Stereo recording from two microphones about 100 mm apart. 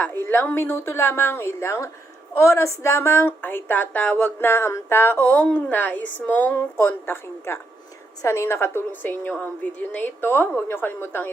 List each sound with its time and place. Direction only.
0.0 s a woman's voice: 20° left (ahead or behind)